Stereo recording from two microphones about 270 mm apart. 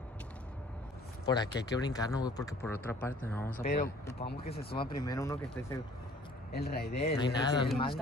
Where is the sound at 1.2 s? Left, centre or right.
Centre.